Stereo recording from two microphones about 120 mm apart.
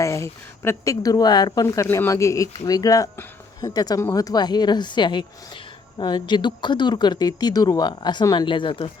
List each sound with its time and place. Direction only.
0.0 s speech: 25° left (ahead or behind); by 8.9 s 45° left (ahead or behind)